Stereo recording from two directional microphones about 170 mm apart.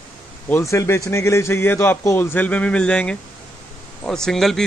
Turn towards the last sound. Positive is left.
turn(degrees=0)  # may be behind; listen again after turning